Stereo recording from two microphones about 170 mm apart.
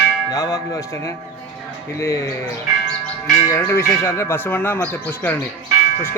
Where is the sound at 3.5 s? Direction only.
15° left (ahead or behind).